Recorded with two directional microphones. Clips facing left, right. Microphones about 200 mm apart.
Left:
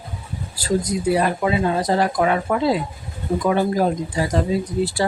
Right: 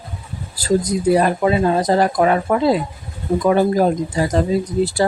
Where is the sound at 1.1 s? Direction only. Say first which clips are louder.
Right 4 dB; 40° right (ahead or behind).